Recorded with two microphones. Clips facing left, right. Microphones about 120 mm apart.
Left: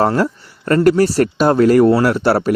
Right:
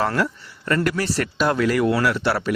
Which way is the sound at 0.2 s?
40° left (ahead or behind).